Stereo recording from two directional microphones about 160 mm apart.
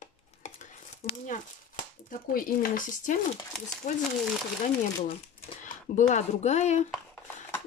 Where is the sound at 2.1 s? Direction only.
60° left (ahead or behind).